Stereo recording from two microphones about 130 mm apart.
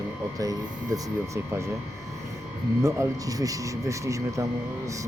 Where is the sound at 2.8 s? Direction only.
20° right (ahead or behind).